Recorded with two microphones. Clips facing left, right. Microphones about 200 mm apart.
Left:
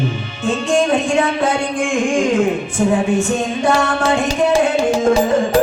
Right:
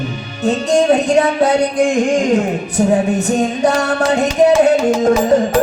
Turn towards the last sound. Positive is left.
turn(degrees=-40)  # may be behind; listen again after turning